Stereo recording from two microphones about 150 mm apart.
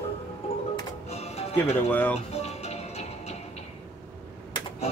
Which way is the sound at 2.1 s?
45° left (ahead or behind).